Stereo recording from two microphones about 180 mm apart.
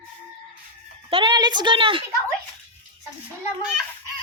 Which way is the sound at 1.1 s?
30° right (ahead or behind).